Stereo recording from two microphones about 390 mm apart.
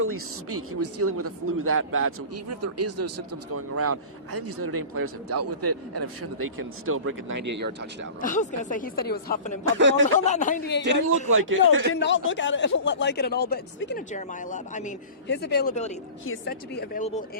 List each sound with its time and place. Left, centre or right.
0.0 s speech: right
6.8 s speech: right
8.2 s a man's voice: centre
9.6 s speech: right
10.2 s a man's voice: centre
11.3 s speech: right
11.9 s a man's voice: left